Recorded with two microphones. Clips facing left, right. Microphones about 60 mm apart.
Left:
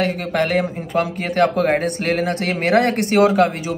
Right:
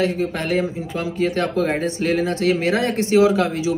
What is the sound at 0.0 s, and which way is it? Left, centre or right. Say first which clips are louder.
Speech: left 2 dB; left.